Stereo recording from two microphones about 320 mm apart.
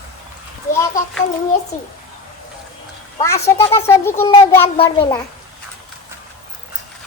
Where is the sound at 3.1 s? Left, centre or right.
Centre.